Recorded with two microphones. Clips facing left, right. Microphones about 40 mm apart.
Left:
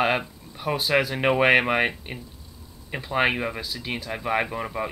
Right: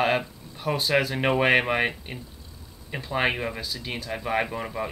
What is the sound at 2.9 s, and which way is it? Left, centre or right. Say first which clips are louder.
Speech: left 2 dB; centre.